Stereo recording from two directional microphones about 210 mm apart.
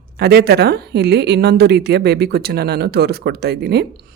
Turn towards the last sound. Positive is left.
turn(degrees=-50)  # may be behind; listen again after turning